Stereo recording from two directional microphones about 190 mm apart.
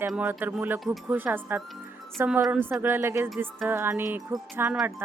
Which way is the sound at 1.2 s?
10° right (ahead or behind).